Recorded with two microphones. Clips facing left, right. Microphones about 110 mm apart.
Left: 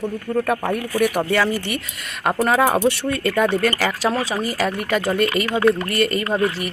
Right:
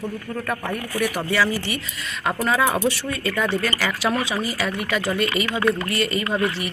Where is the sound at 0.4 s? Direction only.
65° left (ahead or behind); by 6.3 s 50° left (ahead or behind).